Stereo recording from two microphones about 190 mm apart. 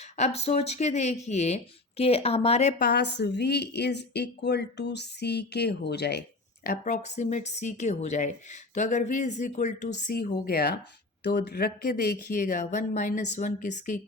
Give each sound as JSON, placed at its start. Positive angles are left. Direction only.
{"t": 0.0, "sound": "speech", "side_deg": 35}
{"t": 2.7, "sound": "a woman's voice", "side_deg": 55}
{"t": 6.7, "sound": "speech", "side_deg": 40}